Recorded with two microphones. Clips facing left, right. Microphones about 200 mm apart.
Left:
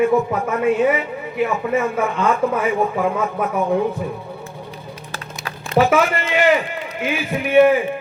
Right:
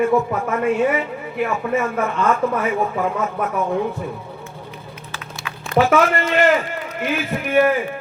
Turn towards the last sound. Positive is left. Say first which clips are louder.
# left 4 dB
turn(degrees=0)  # may be behind; listen again after turning